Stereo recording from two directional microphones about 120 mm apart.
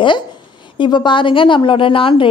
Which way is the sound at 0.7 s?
40° left (ahead or behind).